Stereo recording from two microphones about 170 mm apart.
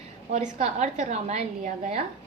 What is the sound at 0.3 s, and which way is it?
A woman's voice, 40° right (ahead or behind).